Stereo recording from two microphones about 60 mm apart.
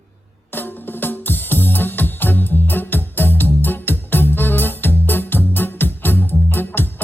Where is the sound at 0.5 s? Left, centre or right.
Left.